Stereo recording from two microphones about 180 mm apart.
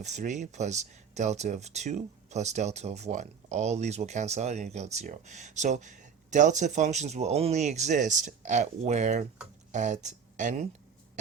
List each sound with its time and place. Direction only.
0.0 s speech: 40° right (ahead or behind)